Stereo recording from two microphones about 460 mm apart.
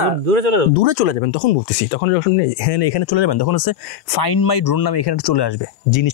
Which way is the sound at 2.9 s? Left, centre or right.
Left.